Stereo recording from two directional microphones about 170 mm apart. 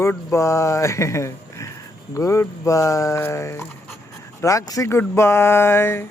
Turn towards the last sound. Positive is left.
turn(degrees=15)  # may be behind; listen again after turning